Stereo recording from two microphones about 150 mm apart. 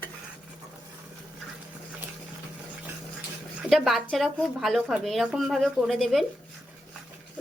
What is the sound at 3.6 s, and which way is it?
Speech, centre (ahead or behind).